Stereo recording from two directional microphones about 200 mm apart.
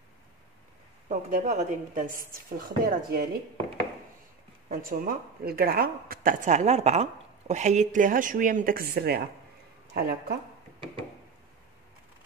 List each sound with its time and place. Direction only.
1.0 s a woman's voice: 40° right (ahead or behind)
4.6 s a woman's voice: 45° right (ahead or behind)